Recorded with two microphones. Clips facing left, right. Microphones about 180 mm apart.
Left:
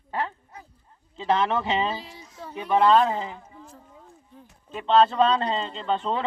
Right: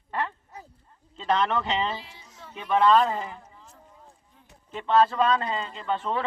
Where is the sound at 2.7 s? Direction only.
5° left (ahead or behind).